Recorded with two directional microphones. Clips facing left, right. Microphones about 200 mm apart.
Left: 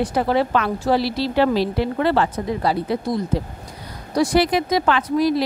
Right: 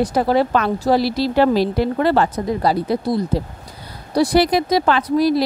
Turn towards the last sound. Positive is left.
turn(degrees=-35)  # may be behind; listen again after turning